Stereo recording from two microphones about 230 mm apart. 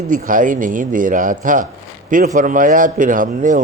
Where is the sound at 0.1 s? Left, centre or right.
Right.